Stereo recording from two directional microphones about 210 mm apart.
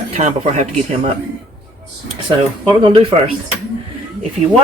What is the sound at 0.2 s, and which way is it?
Speech, 35° right (ahead or behind).